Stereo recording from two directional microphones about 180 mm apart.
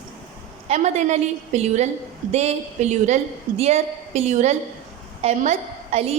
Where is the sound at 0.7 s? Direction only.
40° right (ahead or behind).